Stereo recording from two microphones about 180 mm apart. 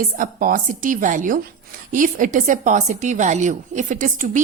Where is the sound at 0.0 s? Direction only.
50° right (ahead or behind).